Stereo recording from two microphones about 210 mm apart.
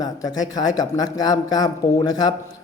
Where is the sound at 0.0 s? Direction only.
15° left (ahead or behind).